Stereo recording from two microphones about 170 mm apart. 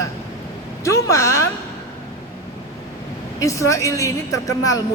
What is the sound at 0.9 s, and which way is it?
Speech, 15° left (ahead or behind).